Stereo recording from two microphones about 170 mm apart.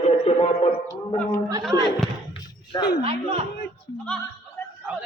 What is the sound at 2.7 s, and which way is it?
Speech, 20° left (ahead or behind).